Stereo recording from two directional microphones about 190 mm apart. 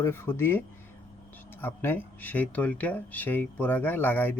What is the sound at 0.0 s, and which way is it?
Speech, 10° left (ahead or behind).